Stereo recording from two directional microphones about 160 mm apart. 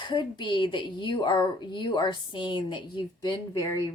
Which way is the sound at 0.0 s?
30° left (ahead or behind).